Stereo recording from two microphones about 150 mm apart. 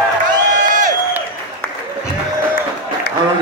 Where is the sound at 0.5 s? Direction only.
60° right (ahead or behind).